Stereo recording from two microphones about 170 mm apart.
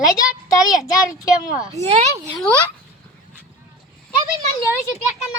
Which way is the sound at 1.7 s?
40° right (ahead or behind).